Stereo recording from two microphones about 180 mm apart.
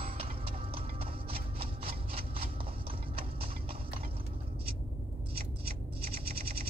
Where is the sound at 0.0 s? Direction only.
30° right (ahead or behind).